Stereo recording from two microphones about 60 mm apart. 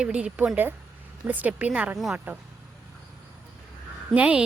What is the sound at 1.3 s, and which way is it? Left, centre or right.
A woman's voice, right.